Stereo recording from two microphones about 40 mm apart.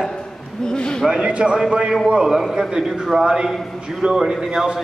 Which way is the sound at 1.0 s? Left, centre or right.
Centre.